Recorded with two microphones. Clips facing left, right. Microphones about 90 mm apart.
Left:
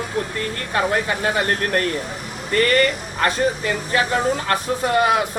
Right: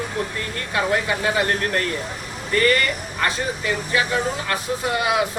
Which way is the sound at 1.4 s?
40° left (ahead or behind).